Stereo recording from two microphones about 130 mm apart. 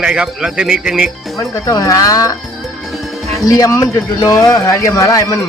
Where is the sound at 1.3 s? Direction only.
25° left (ahead or behind).